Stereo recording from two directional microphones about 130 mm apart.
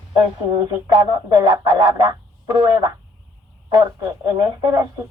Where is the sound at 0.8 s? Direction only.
30° right (ahead or behind).